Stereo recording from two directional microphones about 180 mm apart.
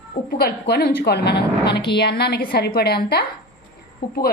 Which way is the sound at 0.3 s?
60° left (ahead or behind).